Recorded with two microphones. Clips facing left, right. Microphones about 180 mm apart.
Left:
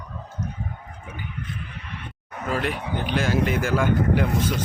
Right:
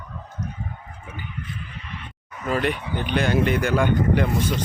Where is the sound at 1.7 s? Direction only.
60° left (ahead or behind).